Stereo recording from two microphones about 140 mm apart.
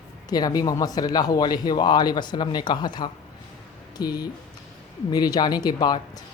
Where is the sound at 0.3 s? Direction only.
25° left (ahead or behind).